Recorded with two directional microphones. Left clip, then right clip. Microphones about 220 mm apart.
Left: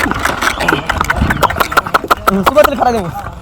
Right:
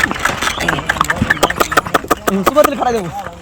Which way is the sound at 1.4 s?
5° left (ahead or behind).